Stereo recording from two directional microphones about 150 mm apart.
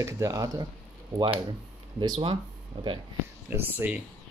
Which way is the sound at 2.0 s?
35° right (ahead or behind).